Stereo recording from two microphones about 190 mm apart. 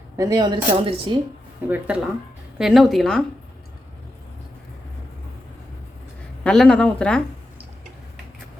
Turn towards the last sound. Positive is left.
turn(degrees=5)  # may be behind; listen again after turning